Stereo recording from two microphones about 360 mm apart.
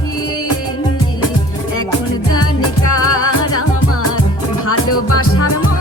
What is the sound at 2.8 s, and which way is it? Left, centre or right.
Music, left.